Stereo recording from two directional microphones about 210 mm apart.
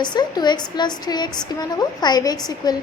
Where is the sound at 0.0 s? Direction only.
20° left (ahead or behind).